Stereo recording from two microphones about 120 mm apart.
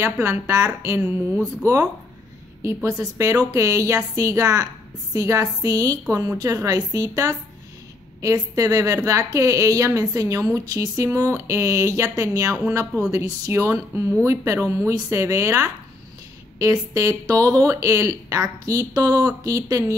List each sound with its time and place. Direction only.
0.0 s speech: 20° right (ahead or behind)
1.0 s speech: 10° right (ahead or behind)
2.6 s speech: 25° right (ahead or behind)